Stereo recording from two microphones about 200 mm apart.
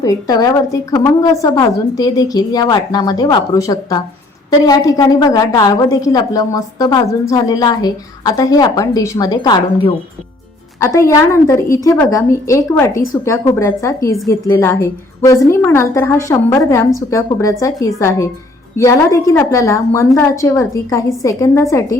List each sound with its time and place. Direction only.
0.0 s a woman's voice: 20° left (ahead or behind)